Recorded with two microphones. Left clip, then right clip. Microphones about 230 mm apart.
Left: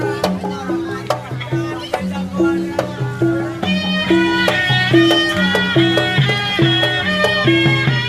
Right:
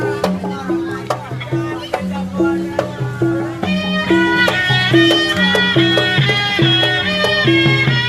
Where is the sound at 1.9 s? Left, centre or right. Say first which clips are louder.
Even; left.